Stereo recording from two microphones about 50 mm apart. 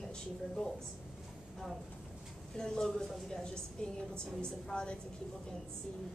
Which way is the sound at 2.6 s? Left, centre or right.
Centre.